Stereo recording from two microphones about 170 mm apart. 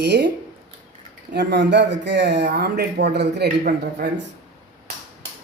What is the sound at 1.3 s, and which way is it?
Speech, 90° right.